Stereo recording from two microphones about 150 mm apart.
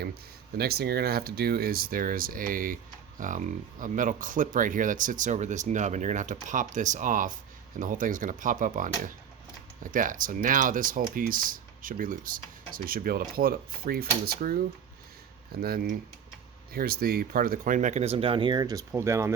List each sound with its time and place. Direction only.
0.0 s speech: 90° right
15.6 s speech: 90° right; by 19.3 s 20° right (ahead or behind)